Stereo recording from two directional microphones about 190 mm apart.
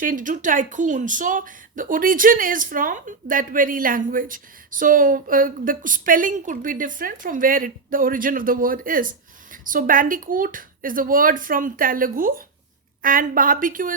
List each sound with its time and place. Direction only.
0.0 s speech: 45° right (ahead or behind)